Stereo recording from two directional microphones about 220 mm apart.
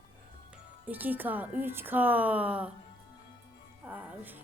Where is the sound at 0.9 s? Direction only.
10° right (ahead or behind).